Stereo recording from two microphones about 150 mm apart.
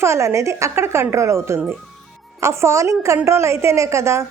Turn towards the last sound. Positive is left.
turn(degrees=-20)  # may be behind; listen again after turning